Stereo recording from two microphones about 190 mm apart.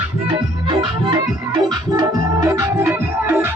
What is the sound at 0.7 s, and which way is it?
Music, 25° right (ahead or behind).